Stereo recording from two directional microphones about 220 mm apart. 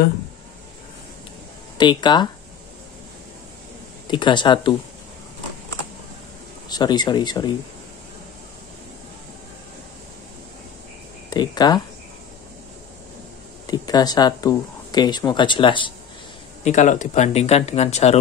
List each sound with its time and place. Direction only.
1.8 s speech: 20° left (ahead or behind)
4.1 s speech: 20° left (ahead or behind)
6.7 s speech: 20° left (ahead or behind)
11.2 s speech: 20° left (ahead or behind)
13.7 s speech: 15° left (ahead or behind)
16.6 s speech: 35° left (ahead or behind)